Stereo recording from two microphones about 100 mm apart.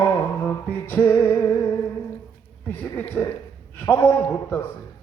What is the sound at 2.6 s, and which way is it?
Speech, 20° left (ahead or behind).